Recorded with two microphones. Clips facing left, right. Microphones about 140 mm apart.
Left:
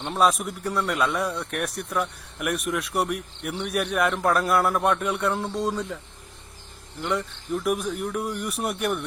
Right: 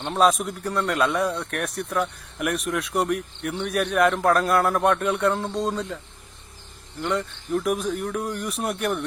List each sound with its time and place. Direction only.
0.0 s speech: centre (ahead or behind)
7.0 s speech: centre (ahead or behind)